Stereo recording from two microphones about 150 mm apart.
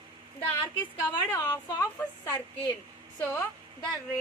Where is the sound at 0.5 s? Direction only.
20° left (ahead or behind).